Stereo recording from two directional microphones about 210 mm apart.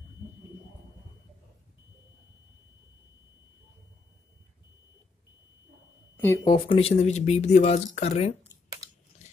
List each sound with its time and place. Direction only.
6.1 s speech: 15° left (ahead or behind); by 8.4 s 30° left (ahead or behind)